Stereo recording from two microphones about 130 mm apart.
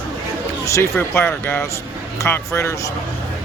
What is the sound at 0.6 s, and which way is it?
Speech, 20° left (ahead or behind).